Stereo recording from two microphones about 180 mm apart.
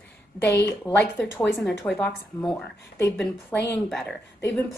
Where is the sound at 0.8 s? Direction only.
5° left (ahead or behind).